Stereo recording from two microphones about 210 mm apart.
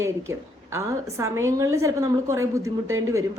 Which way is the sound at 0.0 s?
15° right (ahead or behind).